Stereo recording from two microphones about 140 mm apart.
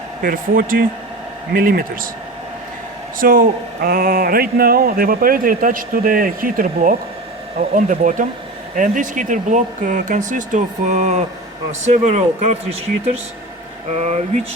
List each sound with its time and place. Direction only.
0.2 s speech: 90° right
3.2 s speech: 90° right; by 12.5 s 55° right (ahead or behind)
13.9 s speech: 50° right (ahead or behind)